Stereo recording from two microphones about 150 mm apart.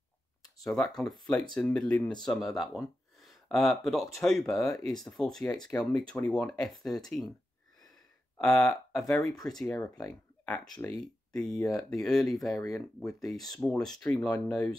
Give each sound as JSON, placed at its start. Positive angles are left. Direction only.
{"t": 0.4, "sound": "speech", "side_deg": 5}
{"t": 5.7, "sound": "speech", "side_deg": 15}
{"t": 8.4, "sound": "speech", "side_deg": 5}
{"t": 11.5, "sound": "speech", "side_deg": 25}
{"t": 12.0, "sound": "speech", "side_deg": 5}
{"t": 12.6, "sound": "speech", "side_deg": 20}
{"t": 13.2, "sound": "speech", "side_deg": 0}